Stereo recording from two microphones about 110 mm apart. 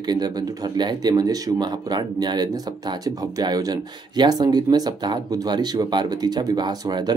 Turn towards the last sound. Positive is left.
turn(degrees=-40)  # may be behind; listen again after turning